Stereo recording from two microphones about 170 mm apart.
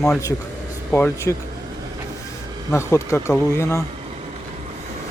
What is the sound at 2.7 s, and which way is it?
Speech, 15° left (ahead or behind).